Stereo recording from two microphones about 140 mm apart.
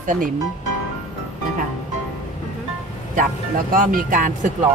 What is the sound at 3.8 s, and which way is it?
Speech, 75° right (ahead or behind).